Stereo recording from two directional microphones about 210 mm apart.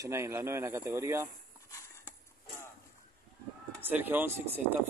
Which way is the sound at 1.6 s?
15° left (ahead or behind).